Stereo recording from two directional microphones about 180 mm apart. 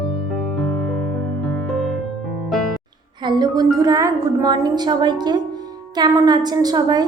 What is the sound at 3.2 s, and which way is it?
A woman's voice, 25° right (ahead or behind).